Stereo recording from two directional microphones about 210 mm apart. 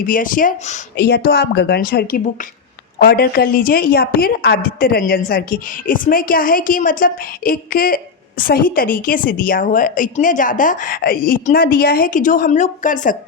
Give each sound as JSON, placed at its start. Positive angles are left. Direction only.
{"t": 0.0, "sound": "a woman's voice", "side_deg": 40}
{"t": 0.9, "sound": "a woman's voice", "side_deg": 50}